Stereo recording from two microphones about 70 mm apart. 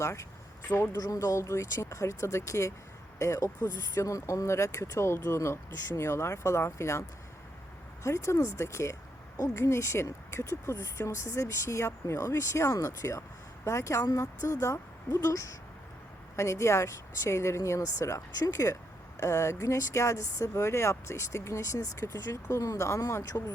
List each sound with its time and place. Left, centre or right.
0.0 s speech: left
0.9 s speech: left
8.0 s speech: left